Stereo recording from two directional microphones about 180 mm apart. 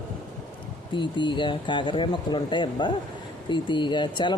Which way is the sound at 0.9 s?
25° left (ahead or behind).